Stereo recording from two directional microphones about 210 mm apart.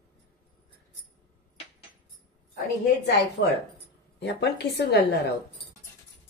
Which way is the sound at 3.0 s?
55° left (ahead or behind).